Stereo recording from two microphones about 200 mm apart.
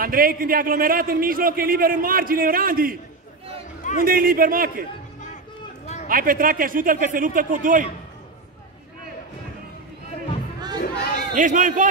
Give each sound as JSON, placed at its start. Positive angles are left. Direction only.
{"t": 0.0, "sound": "a man's voice", "side_deg": -45}
{"t": 4.0, "sound": "a man's voice", "side_deg": -45}
{"t": 6.0, "sound": "a man's voice", "side_deg": -45}
{"t": 10.8, "sound": "a sound", "side_deg": 50}
{"t": 11.3, "sound": "a man's voice", "side_deg": -40}